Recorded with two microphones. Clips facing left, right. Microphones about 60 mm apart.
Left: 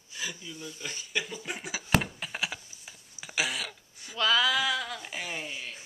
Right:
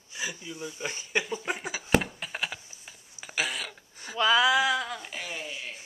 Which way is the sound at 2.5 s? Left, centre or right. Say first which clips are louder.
Even; centre.